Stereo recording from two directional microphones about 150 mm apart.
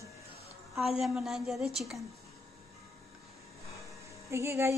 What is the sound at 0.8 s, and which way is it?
A woman's voice, centre (ahead or behind).